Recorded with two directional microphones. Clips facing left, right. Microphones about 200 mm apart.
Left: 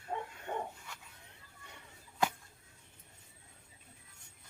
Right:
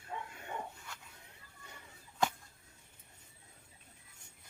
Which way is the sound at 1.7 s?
5° left (ahead or behind).